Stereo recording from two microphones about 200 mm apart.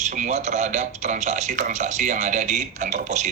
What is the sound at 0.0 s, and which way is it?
Speech, 35° right (ahead or behind).